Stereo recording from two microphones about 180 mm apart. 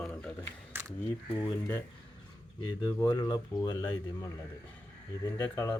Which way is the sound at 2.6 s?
20° left (ahead or behind).